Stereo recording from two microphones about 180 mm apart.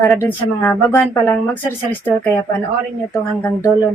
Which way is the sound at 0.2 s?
10° left (ahead or behind).